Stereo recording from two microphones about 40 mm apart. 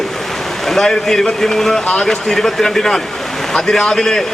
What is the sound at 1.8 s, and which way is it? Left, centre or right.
Speech, left.